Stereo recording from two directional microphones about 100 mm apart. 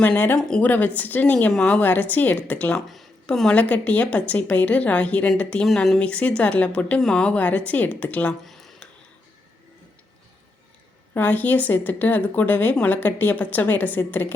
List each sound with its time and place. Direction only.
0.0 s a woman's voice: 20° left (ahead or behind)
0.3 s speech: 5° left (ahead or behind)
0.6 s a woman's voice: 15° left (ahead or behind)
2.9 s a woman's voice: centre (ahead or behind)
8.4 s a sound: centre (ahead or behind)
11.1 s a woman's voice: 20° left (ahead or behind)